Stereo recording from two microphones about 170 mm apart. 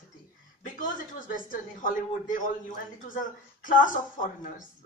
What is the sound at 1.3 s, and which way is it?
Speech, 50° left (ahead or behind).